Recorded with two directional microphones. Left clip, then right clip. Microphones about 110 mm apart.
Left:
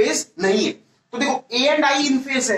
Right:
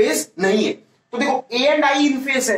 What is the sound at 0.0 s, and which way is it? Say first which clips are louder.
Speech: right 2 dB; 25° right (ahead or behind).